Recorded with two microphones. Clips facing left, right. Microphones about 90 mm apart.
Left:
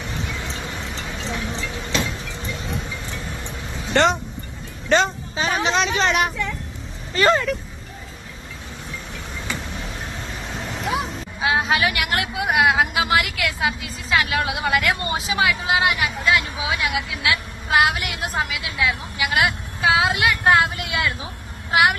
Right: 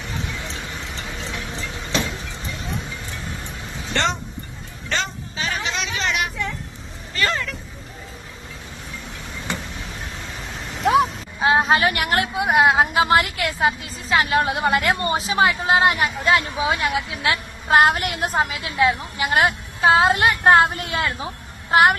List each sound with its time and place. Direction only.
3.9 s speech: 10° left (ahead or behind)
4.9 s vehicle: 25° left (ahead or behind)
5.7 s vehicle: 40° left (ahead or behind)
7.2 s a sound: 25° left (ahead or behind)
11.3 s speech: 35° right (ahead or behind)